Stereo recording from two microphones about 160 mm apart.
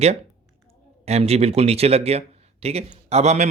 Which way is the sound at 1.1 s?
40° right (ahead or behind).